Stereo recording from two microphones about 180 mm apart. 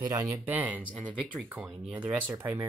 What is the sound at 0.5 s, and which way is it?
Speech, 10° right (ahead or behind).